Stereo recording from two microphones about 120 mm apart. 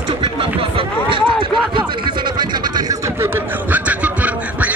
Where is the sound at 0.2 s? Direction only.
50° right (ahead or behind).